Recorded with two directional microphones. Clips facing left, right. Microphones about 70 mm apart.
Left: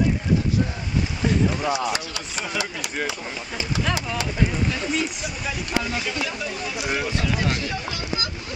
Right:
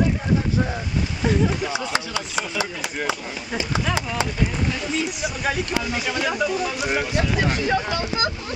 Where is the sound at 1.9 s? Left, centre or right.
Right.